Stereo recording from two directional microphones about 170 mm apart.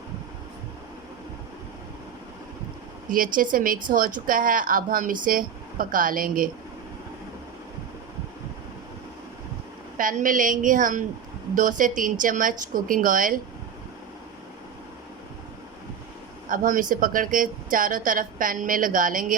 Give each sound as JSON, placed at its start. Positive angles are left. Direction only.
{"t": 3.1, "sound": "speech", "side_deg": -55}
{"t": 10.0, "sound": "speech", "side_deg": -55}
{"t": 16.5, "sound": "speech", "side_deg": -55}